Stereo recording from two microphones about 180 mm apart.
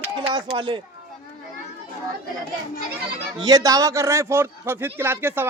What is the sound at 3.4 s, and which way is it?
A man's voice, 20° right (ahead or behind).